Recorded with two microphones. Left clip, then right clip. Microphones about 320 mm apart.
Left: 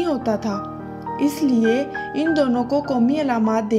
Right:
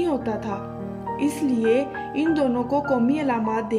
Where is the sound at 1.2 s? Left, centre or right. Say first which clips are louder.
Left 4 dB; left.